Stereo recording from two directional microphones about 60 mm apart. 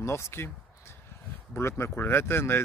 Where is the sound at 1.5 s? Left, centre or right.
Left.